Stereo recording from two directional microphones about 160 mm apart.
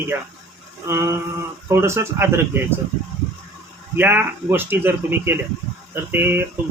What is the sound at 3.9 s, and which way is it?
Speech, 15° right (ahead or behind).